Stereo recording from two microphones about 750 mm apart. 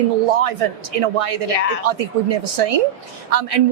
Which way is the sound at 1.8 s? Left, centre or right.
Right.